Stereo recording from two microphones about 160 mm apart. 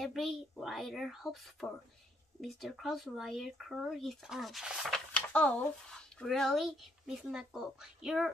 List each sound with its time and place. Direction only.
0.0 s speech: centre (ahead or behind)